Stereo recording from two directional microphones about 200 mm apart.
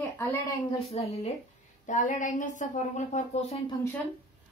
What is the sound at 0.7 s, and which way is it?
A woman's voice, 30° left (ahead or behind).